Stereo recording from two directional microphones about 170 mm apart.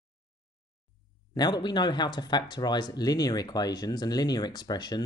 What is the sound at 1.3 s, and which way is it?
Speech, 25° left (ahead or behind).